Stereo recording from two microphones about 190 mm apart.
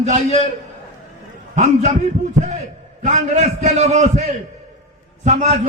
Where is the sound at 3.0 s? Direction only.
40° right (ahead or behind).